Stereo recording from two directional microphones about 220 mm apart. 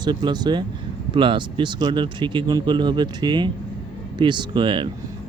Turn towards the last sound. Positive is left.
turn(degrees=-20)  # may be behind; listen again after turning